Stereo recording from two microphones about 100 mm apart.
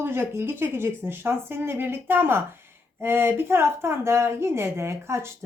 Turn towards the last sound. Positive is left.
turn(degrees=-25)  # may be behind; listen again after turning